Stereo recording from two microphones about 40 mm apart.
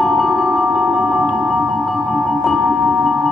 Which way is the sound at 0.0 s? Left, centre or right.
Centre.